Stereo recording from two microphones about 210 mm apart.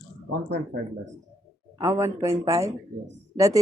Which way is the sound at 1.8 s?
15° right (ahead or behind).